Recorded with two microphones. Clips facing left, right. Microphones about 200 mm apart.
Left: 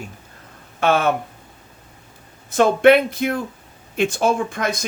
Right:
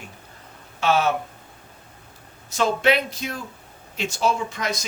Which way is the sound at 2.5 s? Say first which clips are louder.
Left 8 dB; 55° left (ahead or behind).